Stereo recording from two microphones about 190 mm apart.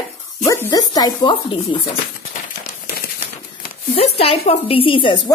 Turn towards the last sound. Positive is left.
turn(degrees=25)  # may be behind; listen again after turning